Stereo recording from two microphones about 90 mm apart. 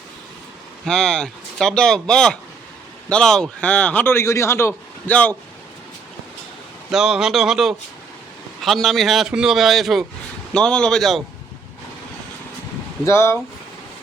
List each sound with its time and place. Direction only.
0.9 s speech: 10° left (ahead or behind)
4.0 s speech: 30° left (ahead or behind)
5.0 s speech: 15° left (ahead or behind)
6.9 s speech: 5° right (ahead or behind)
10.5 s speech: 10° left (ahead or behind)
13.1 s speech: 30° left (ahead or behind)